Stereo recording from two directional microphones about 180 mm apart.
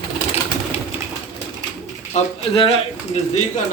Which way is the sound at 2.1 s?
40° left (ahead or behind).